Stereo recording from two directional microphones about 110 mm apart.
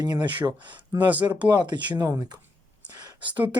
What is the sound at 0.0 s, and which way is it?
Speech, 40° right (ahead or behind).